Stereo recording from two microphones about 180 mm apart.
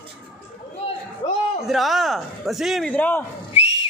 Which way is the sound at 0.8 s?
35° left (ahead or behind).